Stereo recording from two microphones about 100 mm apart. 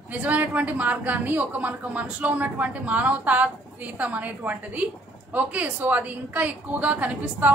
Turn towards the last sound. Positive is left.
turn(degrees=-15)  # may be behind; listen again after turning